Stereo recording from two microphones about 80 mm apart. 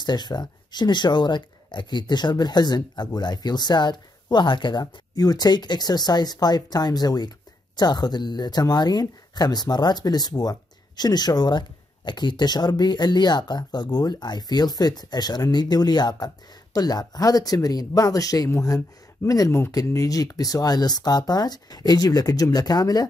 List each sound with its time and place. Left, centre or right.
0.0 s speech: left